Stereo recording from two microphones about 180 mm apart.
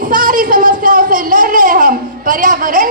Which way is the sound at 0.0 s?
50° right (ahead or behind).